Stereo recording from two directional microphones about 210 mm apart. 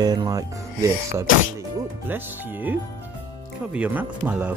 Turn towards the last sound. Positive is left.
turn(degrees=-5)  # may be behind; listen again after turning